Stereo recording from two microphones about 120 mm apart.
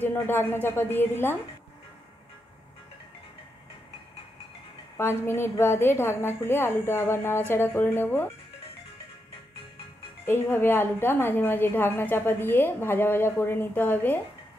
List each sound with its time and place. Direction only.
0.0 s a woman's voice: 15° left (ahead or behind)
4.9 s a woman's voice: 20° left (ahead or behind)
10.2 s a woman's voice: 20° left (ahead or behind)